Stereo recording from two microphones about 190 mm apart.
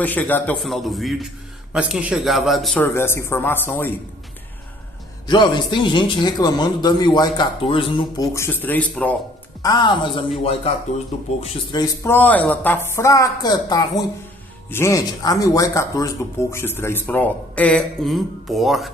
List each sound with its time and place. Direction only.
0.0 s a man's voice: 10° left (ahead or behind)
5.3 s speech: 25° left (ahead or behind)
8.3 s speech: 15° left (ahead or behind)
9.6 s speech: 20° left (ahead or behind)
11.1 s speech: 35° left (ahead or behind)
11.4 s speech: 20° left (ahead or behind); by 18.9 s centre (ahead or behind)